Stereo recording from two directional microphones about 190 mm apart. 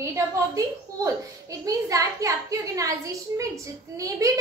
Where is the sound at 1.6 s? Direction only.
15° right (ahead or behind).